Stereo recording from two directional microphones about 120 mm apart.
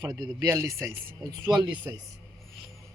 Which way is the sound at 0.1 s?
35° right (ahead or behind).